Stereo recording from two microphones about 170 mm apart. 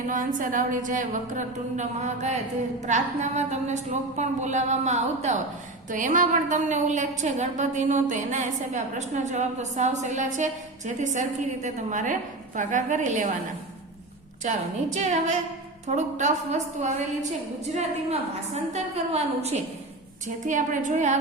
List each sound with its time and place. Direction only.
0.1 s a woman's voice: 50° right (ahead or behind)
14.4 s a woman's voice: 45° right (ahead or behind)